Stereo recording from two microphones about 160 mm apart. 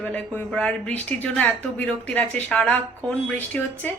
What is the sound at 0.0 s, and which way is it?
A woman's voice, 10° left (ahead or behind).